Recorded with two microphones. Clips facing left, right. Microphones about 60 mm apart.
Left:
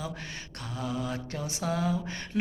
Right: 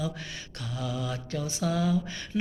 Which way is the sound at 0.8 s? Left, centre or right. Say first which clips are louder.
Left 1 dB; left.